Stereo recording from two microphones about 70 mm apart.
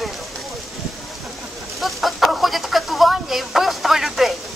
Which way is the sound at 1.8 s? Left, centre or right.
Centre.